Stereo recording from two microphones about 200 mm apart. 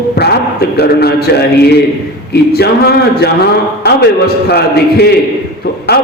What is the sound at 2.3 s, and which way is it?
A man's voice, 55° left (ahead or behind).